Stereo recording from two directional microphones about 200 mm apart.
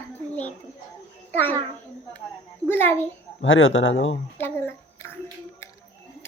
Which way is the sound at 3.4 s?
75° left (ahead or behind).